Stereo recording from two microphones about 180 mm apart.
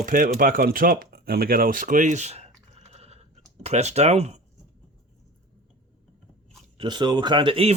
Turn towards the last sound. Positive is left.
turn(degrees=-30)  # may be behind; listen again after turning